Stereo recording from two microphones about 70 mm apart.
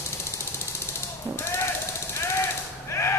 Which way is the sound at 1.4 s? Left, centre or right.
Left.